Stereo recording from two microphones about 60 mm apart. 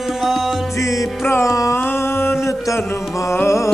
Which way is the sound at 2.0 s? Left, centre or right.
Left.